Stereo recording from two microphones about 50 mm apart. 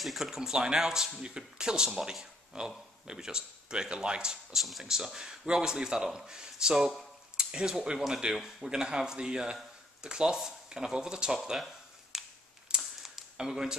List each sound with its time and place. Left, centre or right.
0.0 s speech: centre
4.6 s speech: centre
12.1 s a sound: centre